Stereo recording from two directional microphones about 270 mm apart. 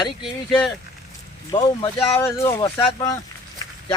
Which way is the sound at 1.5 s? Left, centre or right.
Centre.